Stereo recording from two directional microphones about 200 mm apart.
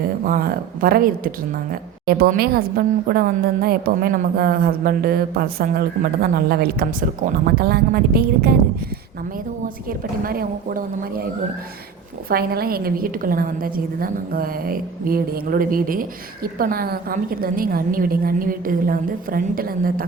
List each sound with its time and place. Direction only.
0.3 s a woman's voice: 45° right (ahead or behind)
10.2 s a woman's voice: 45° right (ahead or behind)
12.3 s a woman's voice: 50° right (ahead or behind)